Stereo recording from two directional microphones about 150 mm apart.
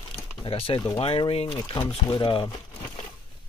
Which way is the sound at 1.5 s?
25° left (ahead or behind).